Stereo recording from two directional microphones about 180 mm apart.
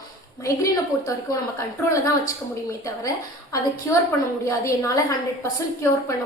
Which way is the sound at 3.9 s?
20° left (ahead or behind).